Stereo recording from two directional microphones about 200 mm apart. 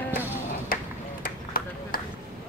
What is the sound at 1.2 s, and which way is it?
Vehicle, 45° left (ahead or behind).